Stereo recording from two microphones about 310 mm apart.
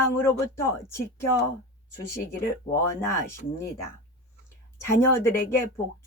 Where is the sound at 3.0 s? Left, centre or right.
Centre.